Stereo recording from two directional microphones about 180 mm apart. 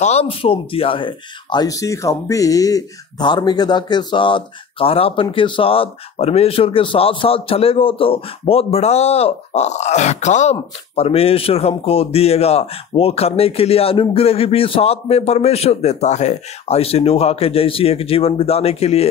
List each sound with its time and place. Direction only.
0.0 s speech: 35° left (ahead or behind)